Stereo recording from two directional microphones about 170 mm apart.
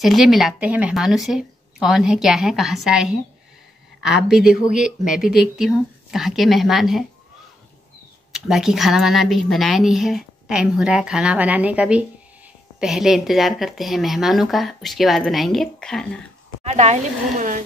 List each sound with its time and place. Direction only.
0.0 s a woman's voice: centre (ahead or behind)
8.3 s a woman's voice: 5° right (ahead or behind)
16.6 s speech: 40° right (ahead or behind)